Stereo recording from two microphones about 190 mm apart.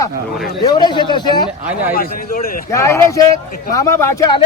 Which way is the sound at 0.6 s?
20° left (ahead or behind).